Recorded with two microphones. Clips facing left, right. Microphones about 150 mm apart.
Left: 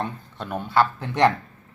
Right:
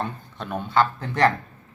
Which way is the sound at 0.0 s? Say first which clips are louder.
Even; 10° left (ahead or behind).